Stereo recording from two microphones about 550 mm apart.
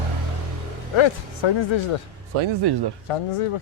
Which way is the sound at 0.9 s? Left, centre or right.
Left.